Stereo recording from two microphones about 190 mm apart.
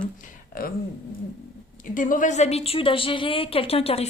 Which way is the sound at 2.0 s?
45° left (ahead or behind).